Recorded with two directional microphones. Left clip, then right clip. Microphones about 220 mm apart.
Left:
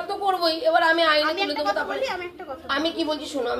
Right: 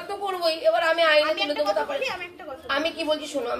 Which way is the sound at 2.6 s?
5° right (ahead or behind).